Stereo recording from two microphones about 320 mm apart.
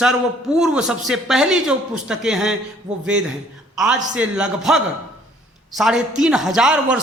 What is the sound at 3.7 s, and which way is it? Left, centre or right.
A man's voice, centre.